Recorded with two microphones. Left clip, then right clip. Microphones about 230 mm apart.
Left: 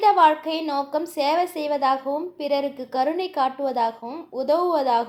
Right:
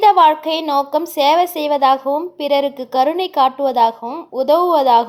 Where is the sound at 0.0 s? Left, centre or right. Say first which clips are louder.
Right 6 dB; right.